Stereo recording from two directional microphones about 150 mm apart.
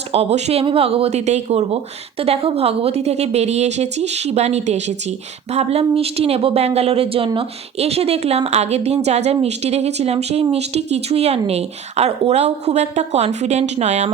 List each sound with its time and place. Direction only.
0.1 s speech: 45° right (ahead or behind)